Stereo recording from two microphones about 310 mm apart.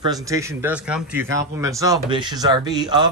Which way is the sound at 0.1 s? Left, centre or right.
Centre.